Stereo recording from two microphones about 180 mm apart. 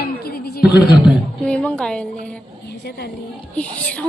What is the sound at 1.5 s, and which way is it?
Speech, 5° left (ahead or behind).